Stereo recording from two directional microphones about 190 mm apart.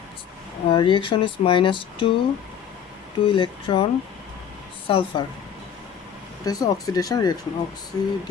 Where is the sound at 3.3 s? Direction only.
30° left (ahead or behind).